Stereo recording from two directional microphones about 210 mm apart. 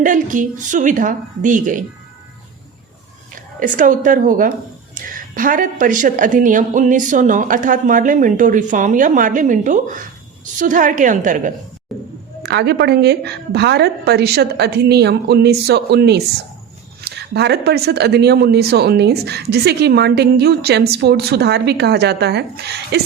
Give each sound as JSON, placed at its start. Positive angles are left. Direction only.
{"t": 0.0, "sound": "speech", "side_deg": -40}
{"t": 3.6, "sound": "speech", "side_deg": -40}
{"t": 5.0, "sound": "a sound", "side_deg": -40}
{"t": 5.3, "sound": "speech", "side_deg": -40}
{"t": 11.9, "sound": "music", "side_deg": 0}
{"t": 12.4, "sound": "speech", "side_deg": -55}